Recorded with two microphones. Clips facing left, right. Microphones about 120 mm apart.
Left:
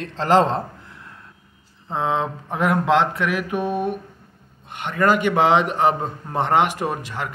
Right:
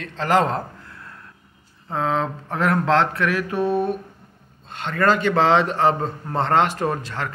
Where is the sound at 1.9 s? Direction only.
20° left (ahead or behind).